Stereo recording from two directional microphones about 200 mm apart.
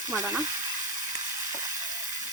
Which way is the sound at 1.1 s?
15° right (ahead or behind).